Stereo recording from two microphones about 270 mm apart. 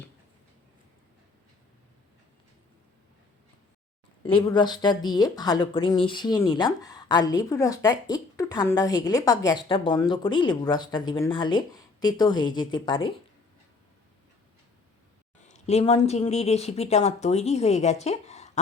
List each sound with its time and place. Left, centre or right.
4.2 s speech: centre
15.4 s speech: left